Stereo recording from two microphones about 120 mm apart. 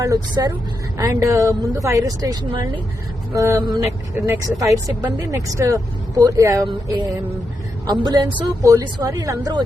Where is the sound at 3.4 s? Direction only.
20° right (ahead or behind).